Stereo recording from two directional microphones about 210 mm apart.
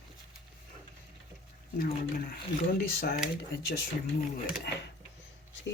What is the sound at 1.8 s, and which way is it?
Speech, 40° left (ahead or behind).